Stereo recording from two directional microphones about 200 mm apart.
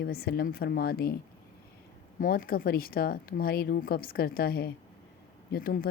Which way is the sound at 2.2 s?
45° left (ahead or behind).